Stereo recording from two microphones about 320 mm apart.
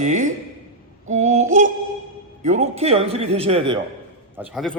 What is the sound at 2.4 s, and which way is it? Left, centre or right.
A man's voice, centre.